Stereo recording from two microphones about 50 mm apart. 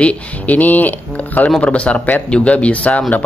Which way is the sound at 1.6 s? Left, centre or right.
Left.